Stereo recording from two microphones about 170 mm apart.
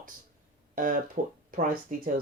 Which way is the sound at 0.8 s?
55° right (ahead or behind).